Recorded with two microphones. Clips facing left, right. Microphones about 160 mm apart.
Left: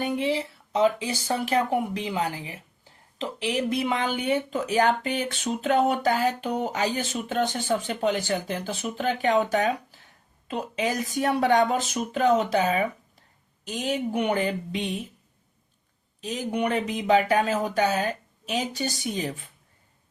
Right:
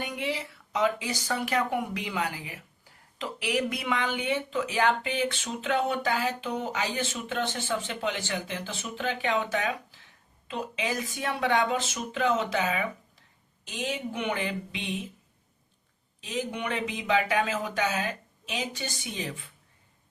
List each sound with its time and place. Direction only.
0.0 s speech: 30° left (ahead or behind)
16.2 s speech: 40° left (ahead or behind)